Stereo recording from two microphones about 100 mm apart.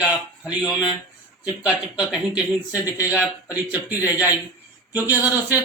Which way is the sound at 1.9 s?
10° right (ahead or behind).